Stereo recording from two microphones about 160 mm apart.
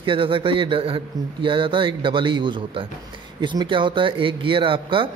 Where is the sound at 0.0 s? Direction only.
30° right (ahead or behind).